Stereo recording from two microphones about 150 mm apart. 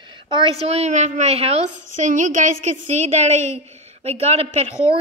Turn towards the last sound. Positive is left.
turn(degrees=-45)  # may be behind; listen again after turning